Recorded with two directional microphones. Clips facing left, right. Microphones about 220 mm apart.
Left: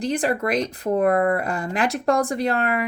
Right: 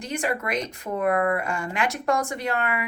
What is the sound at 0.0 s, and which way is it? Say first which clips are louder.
Speech: left 6 dB; 35° left (ahead or behind).